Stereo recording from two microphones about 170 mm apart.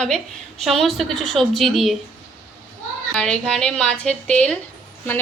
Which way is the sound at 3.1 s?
5° left (ahead or behind).